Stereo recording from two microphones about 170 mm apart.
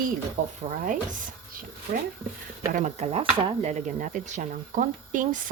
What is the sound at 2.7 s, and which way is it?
Speech, 40° right (ahead or behind).